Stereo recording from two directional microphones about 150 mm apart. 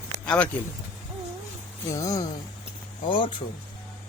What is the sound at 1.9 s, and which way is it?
Speech, 20° left (ahead or behind).